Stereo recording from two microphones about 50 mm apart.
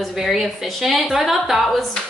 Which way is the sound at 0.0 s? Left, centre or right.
Centre.